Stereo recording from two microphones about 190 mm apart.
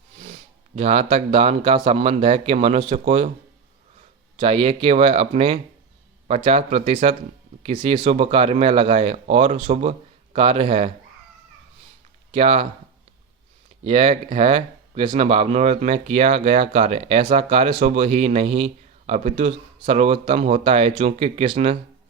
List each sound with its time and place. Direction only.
0.8 s speech: 35° right (ahead or behind)
4.4 s speech: 30° right (ahead or behind)
12.3 s speech: 30° right (ahead or behind)
13.8 s speech: 30° right (ahead or behind)